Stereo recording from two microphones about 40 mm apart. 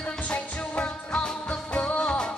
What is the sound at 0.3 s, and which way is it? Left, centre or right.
Music, left.